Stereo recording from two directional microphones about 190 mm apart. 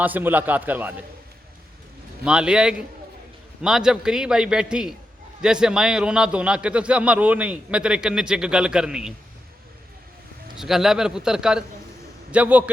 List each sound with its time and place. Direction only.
0.0 s a man's voice: 10° right (ahead or behind)
2.2 s a man's voice: 5° right (ahead or behind)
10.6 s a man's voice: centre (ahead or behind)